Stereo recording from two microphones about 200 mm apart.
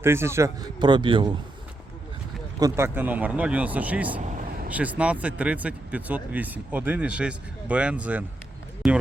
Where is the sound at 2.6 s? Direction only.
15° right (ahead or behind).